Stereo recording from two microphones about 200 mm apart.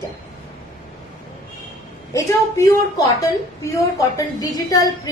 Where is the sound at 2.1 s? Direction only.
15° left (ahead or behind).